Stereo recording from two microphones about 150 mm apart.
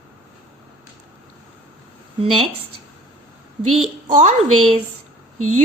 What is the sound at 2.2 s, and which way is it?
Speech, 35° right (ahead or behind).